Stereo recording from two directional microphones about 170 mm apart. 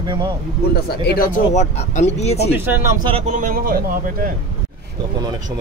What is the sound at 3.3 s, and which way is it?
A man's voice, 50° right (ahead or behind).